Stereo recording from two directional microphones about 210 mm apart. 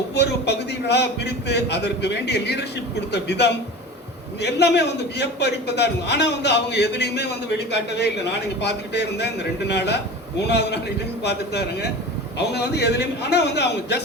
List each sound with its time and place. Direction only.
0.1 s a man's voice: 55° left (ahead or behind)